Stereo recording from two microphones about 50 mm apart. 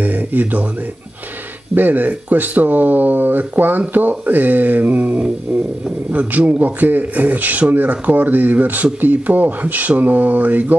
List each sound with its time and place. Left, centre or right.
0.0 s speech: right
1.8 s a man's voice: right